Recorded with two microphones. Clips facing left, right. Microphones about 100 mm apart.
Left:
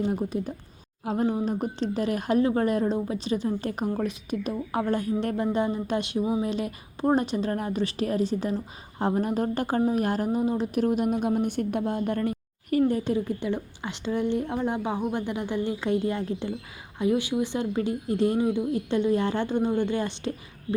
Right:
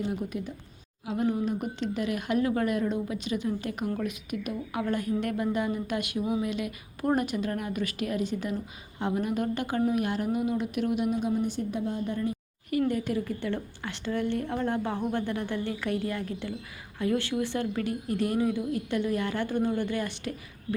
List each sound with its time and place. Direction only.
0.1 s speech: 40° left (ahead or behind); by 12.4 s 60° left (ahead or behind)
12.7 s speech: 40° left (ahead or behind)
13.1 s speech: 20° left (ahead or behind)